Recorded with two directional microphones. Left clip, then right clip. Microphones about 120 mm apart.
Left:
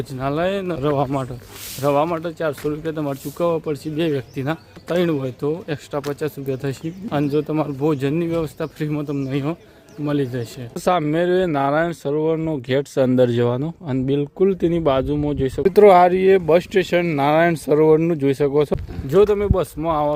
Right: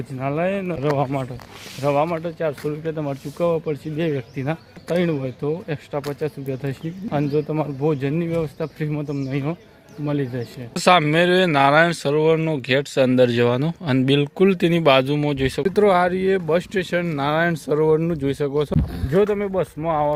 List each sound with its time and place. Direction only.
0.2 s speech: 20° left (ahead or behind)
12.6 s speech: 30° left (ahead or behind)
13.5 s speech: 10° left (ahead or behind)
15.6 s speech: 30° left (ahead or behind)